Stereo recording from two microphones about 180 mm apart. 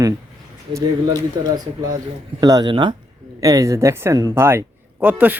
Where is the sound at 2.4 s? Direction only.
20° right (ahead or behind).